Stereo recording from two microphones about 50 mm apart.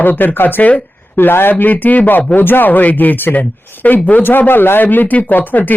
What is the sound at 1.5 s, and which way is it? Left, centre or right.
Speech, left.